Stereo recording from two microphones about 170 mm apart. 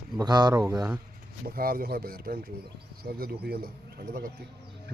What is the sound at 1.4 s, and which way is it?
Speech, 60° right (ahead or behind).